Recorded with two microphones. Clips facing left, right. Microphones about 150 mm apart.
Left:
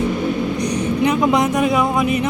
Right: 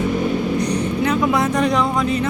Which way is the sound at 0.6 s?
15° left (ahead or behind).